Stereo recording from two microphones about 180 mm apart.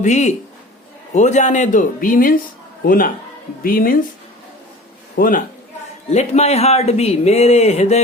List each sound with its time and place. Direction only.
0.0 s speech: 40° left (ahead or behind)
5.1 s a man's voice: 50° left (ahead or behind)
6.1 s speech: 35° left (ahead or behind)